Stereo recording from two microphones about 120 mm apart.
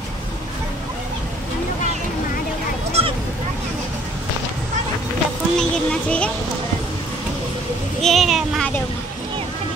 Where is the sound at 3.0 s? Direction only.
55° right (ahead or behind).